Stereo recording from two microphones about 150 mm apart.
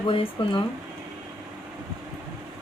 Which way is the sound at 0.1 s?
35° left (ahead or behind).